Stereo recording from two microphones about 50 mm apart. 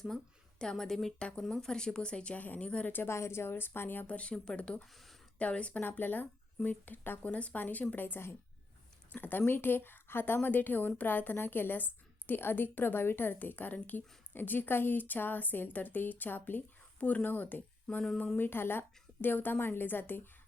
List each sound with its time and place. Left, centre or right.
0.6 s a woman's voice: centre
1.2 s speech: left
2.4 s a woman's voice: left
3.1 s a woman's voice: left
4.0 s speech: left
5.9 s a woman's voice: left
7.2 s a woman's voice: left
17.0 s speech: left
17.2 s a woman's voice: left